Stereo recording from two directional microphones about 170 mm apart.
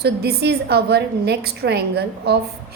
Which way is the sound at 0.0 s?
70° right (ahead or behind).